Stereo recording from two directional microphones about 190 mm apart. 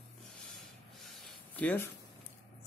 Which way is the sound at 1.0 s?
Centre (ahead or behind).